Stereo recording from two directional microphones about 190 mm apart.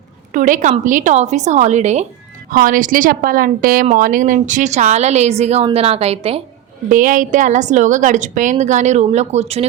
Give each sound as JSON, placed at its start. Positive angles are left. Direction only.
{"t": 0.3, "sound": "a woman's voice", "side_deg": -45}
{"t": 6.8, "sound": "a woman's voice", "side_deg": -45}